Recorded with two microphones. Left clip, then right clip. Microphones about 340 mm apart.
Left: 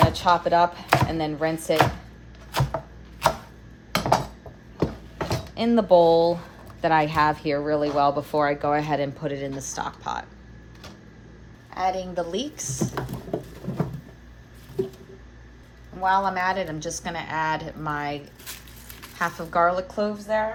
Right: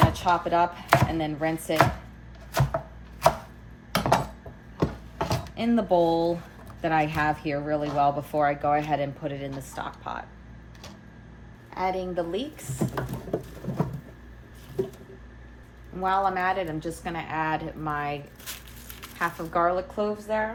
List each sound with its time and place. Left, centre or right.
0.1 s chopping: left
1.2 s speech: left
3.9 s dishes: centre
4.8 s a sound: centre
5.5 s speech: left
11.8 s speech: left
12.8 s patter: centre
16.0 s speech: left
19.2 s speech: left